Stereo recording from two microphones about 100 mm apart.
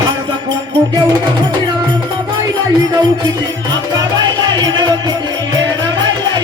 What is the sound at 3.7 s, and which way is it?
Music, 45° right (ahead or behind).